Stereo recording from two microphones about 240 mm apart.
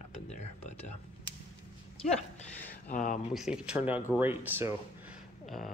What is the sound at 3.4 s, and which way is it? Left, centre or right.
Speech, centre.